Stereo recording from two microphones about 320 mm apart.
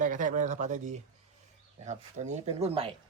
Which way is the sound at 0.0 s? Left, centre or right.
Right.